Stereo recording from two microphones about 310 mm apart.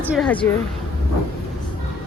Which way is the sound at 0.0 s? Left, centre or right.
Centre.